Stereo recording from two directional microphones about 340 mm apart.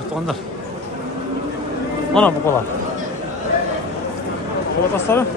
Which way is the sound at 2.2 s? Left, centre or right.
Centre.